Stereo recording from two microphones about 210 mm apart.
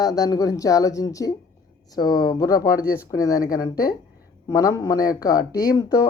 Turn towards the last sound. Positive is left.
turn(degrees=20)  # may be behind; listen again after turning